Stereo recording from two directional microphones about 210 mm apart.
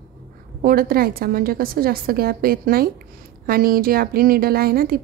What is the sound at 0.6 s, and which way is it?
A woman's voice, 45° right (ahead or behind).